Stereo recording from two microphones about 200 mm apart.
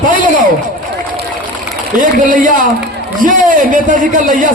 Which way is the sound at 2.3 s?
40° right (ahead or behind).